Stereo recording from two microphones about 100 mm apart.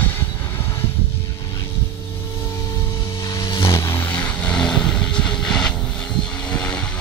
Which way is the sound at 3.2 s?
40° left (ahead or behind).